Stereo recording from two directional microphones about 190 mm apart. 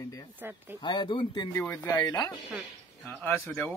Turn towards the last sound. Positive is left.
turn(degrees=10)  # may be behind; listen again after turning